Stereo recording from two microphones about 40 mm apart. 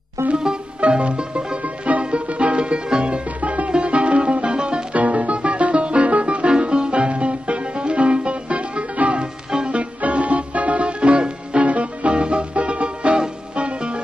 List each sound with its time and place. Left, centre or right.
0.3 s music: right
3.3 s music: right
4.9 s music: right
9.2 s music: right
9.8 s music: right